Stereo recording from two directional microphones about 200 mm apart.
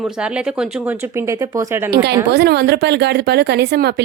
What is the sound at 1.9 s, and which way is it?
Speech, 55° right (ahead or behind).